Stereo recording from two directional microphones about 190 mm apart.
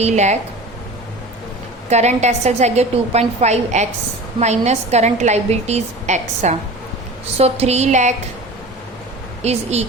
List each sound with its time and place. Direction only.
0.0 s a woman's voice: 35° right (ahead or behind)
1.9 s a woman's voice: 35° right (ahead or behind)
9.4 s a woman's voice: 35° right (ahead or behind)